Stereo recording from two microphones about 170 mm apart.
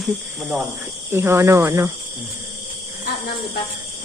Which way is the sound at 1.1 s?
15° right (ahead or behind).